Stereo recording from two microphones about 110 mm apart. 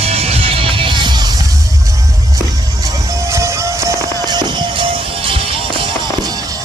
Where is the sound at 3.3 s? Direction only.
25° right (ahead or behind).